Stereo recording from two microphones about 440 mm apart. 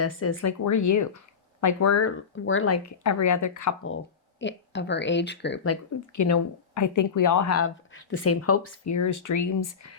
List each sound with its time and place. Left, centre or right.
0.0 s speech: left
3.8 s speech: left
6.1 s speech: left